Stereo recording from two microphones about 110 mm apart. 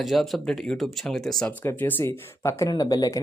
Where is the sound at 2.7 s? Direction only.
35° left (ahead or behind).